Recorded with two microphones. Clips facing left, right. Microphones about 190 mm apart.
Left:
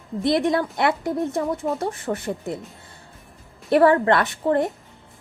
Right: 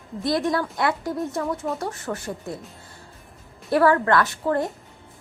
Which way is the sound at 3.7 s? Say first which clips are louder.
Left 2 dB; 25° left (ahead or behind).